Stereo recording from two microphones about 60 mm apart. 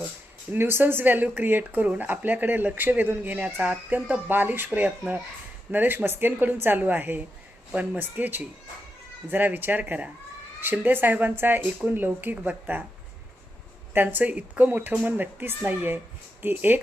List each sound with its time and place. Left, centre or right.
0.5 s speech: right
4.3 s speech: right
13.9 s speech: right